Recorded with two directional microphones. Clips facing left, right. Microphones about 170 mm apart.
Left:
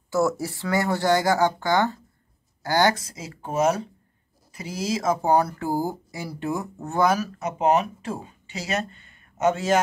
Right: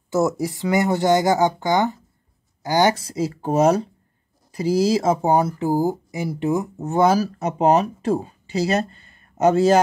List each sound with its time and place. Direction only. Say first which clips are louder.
0.1 s speech: right 3 dB; 20° right (ahead or behind)
3.0 s speech: right 14 dB; 35° right (ahead or behind)